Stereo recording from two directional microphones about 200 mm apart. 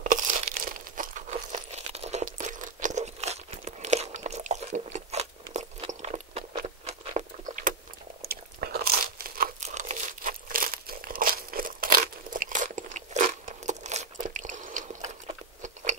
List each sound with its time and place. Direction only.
0.0 s crumpling: 40° right (ahead or behind)
8.2 s crunch: 50° right (ahead or behind)
15.6 s biting: 35° right (ahead or behind)